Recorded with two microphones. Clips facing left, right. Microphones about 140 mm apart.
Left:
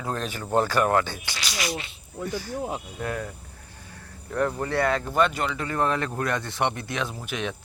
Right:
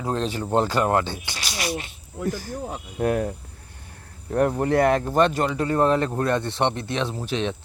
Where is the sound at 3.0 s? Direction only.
55° right (ahead or behind).